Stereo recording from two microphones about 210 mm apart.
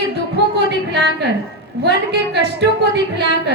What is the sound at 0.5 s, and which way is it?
Music, 55° right (ahead or behind).